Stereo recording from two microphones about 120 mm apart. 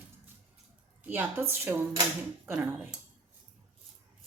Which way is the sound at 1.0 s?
15° right (ahead or behind).